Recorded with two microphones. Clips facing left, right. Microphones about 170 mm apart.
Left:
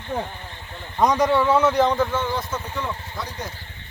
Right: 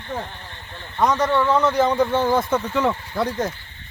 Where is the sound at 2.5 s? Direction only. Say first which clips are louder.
Right 8 dB; 80° right.